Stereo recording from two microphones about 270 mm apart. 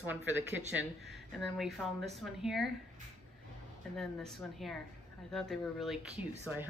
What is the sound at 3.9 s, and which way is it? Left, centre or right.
Speech, centre.